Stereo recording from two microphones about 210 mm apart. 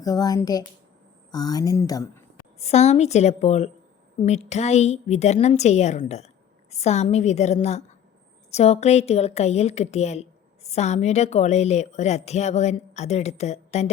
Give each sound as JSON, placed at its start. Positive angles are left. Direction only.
{"t": 0.0, "sound": "speech", "side_deg": 15}
{"t": 2.6, "sound": "a woman's voice", "side_deg": 30}